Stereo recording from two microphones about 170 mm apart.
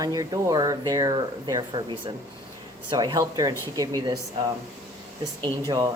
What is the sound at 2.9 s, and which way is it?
Speech, 25° right (ahead or behind).